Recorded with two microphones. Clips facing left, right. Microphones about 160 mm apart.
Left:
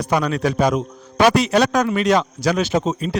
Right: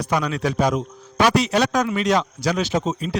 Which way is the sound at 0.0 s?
55° left (ahead or behind).